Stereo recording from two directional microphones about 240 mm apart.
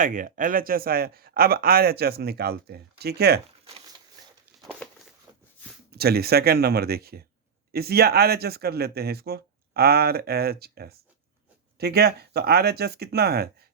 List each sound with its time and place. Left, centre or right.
0.0 s speech: right
5.9 s speech: right